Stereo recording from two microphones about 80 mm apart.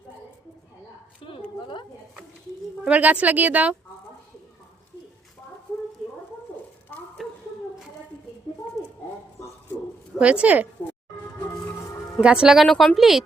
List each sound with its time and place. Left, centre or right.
1.2 s a sound: left
2.8 s speech: centre
7.2 s a sound: centre
10.2 s a woman's voice: centre
12.2 s a woman's voice: centre
12.6 s speech: centre